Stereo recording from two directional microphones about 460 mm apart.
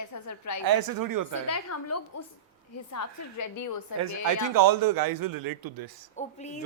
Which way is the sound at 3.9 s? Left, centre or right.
Right.